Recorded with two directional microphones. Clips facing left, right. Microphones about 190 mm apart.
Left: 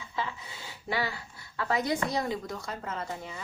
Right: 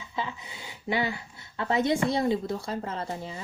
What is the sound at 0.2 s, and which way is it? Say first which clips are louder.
A woman's voice: right 1 dB; 20° right (ahead or behind).